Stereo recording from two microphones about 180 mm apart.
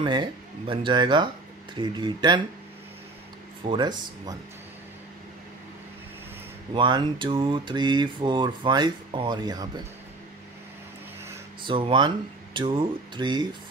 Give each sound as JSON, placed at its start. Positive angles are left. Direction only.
{"t": 0.0, "sound": "speech", "side_deg": -25}
{"t": 3.6, "sound": "speech", "side_deg": -25}
{"t": 6.7, "sound": "speech", "side_deg": -25}
{"t": 11.6, "sound": "speech", "side_deg": -30}